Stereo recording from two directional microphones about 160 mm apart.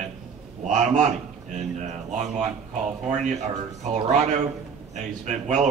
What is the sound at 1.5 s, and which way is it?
Speech, 45° right (ahead or behind).